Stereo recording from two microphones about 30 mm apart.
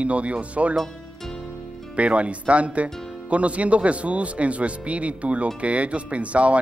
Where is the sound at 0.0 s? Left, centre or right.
Right.